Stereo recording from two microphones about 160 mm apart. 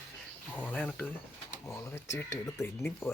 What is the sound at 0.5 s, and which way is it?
Speech, 10° left (ahead or behind).